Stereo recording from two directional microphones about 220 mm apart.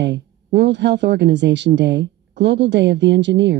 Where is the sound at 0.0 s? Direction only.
50° right (ahead or behind).